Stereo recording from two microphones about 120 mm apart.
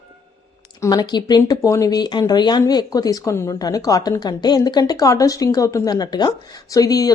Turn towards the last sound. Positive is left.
turn(degrees=30)  # may be behind; listen again after turning